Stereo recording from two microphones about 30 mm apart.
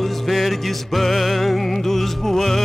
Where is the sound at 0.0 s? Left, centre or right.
Centre.